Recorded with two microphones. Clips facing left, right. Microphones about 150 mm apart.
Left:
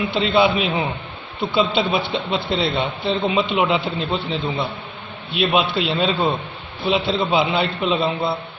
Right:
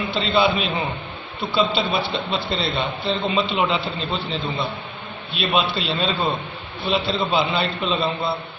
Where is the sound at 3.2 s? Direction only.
5° left (ahead or behind).